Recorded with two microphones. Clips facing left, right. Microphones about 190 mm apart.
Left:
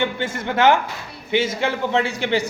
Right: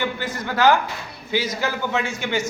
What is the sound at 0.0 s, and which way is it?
A man's voice, 25° left (ahead or behind).